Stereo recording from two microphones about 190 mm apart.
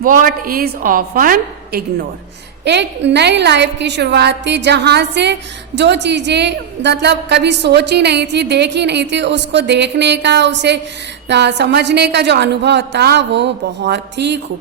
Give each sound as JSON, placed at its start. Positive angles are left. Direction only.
{"t": 0.0, "sound": "a woman's voice", "side_deg": -45}
{"t": 2.6, "sound": "a woman's voice", "side_deg": -65}